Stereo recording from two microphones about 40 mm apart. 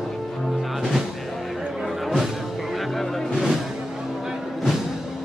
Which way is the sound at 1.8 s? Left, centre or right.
Centre.